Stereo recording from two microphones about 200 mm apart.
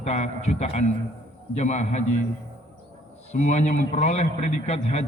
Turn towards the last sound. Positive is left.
turn(degrees=35)  # may be behind; listen again after turning